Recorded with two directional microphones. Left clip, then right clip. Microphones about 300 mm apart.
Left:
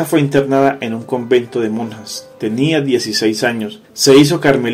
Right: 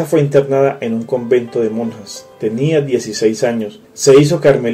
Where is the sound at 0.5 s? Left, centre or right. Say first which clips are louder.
Even; centre.